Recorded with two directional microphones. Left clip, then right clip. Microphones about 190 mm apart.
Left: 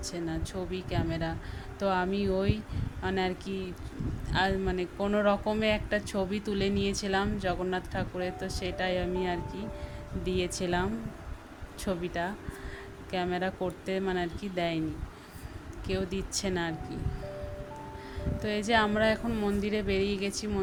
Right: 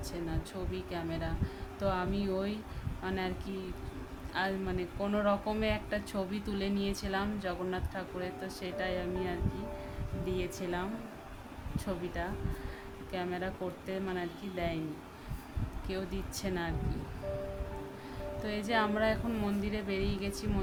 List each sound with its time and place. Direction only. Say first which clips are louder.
0.0 s speech: left 4 dB; 20° left (ahead or behind)
11.9 s speech: left 5 dB; 25° left (ahead or behind)
15.9 s speech: left 6 dB; 20° left (ahead or behind)
18.4 s speech: left 5 dB; 20° left (ahead or behind)